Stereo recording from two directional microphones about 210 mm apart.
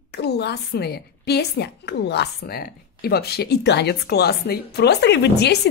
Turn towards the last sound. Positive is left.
turn(degrees=50)  # may be behind; listen again after turning